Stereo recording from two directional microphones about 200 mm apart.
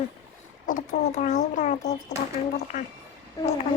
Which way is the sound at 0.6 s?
40° left (ahead or behind).